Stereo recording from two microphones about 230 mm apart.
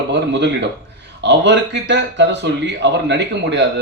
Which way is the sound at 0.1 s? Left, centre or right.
Right.